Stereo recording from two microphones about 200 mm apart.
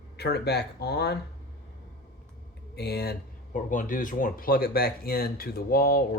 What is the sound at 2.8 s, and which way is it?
Speech, 55° left (ahead or behind).